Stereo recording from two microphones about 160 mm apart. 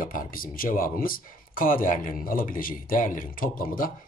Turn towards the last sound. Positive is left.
turn(degrees=60)  # may be behind; listen again after turning